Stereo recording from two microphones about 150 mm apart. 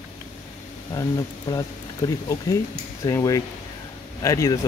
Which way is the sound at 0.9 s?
25° left (ahead or behind).